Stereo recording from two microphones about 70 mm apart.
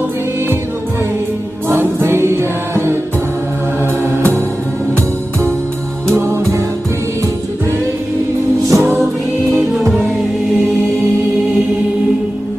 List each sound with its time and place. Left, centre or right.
1.8 s music: right
6.1 s music: right
8.6 s music: right